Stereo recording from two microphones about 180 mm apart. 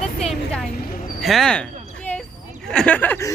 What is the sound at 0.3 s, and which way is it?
Vehicle, centre (ahead or behind).